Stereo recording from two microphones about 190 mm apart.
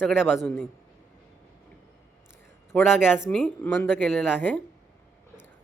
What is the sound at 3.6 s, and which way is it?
Speech, 10° left (ahead or behind).